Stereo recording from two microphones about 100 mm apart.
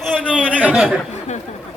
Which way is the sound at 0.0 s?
5° left (ahead or behind).